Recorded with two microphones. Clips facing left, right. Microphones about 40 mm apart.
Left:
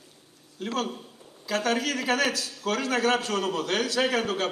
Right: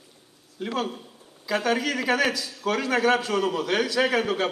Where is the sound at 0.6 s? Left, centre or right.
Right.